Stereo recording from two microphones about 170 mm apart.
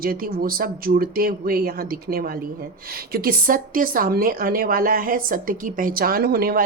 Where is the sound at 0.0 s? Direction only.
60° right (ahead or behind).